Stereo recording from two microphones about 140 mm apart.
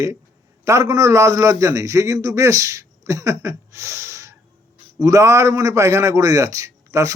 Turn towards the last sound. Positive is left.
turn(degrees=-20)  # may be behind; listen again after turning